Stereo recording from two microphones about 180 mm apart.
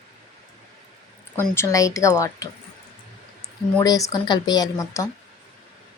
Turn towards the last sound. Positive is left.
turn(degrees=20)  # may be behind; listen again after turning